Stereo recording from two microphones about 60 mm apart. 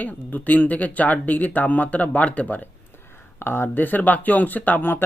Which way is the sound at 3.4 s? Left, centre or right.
Left.